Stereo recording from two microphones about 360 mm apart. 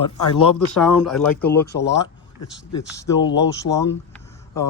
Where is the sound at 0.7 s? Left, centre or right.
Centre.